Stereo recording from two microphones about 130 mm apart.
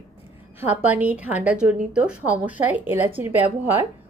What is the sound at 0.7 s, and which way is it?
A woman's voice, 10° right (ahead or behind).